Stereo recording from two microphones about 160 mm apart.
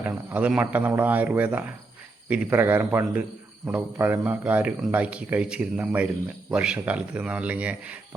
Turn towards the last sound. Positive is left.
turn(degrees=-10)  # may be behind; listen again after turning